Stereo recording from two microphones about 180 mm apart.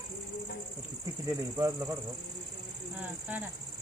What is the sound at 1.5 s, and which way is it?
Speech, 15° right (ahead or behind).